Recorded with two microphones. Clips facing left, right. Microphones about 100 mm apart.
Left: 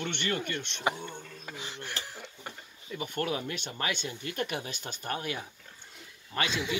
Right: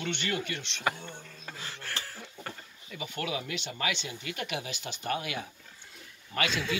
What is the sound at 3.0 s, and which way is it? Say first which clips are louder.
Speech: left 2 dB; 45° left (ahead or behind).